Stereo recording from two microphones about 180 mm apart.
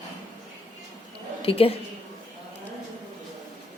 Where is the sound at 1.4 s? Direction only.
30° left (ahead or behind).